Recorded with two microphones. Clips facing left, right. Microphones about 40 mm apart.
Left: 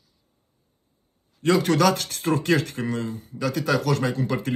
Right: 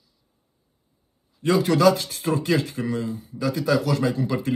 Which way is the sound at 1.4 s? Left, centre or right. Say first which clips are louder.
Right 1 dB; left.